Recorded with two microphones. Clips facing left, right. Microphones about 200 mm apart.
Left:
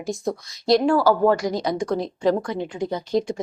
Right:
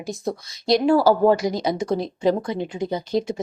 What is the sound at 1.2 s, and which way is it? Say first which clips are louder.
Speech: right 1 dB; 20° right (ahead or behind).